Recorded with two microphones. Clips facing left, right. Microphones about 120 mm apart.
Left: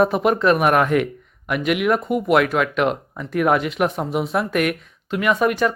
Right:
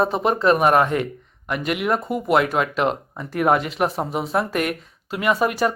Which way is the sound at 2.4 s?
30° right (ahead or behind).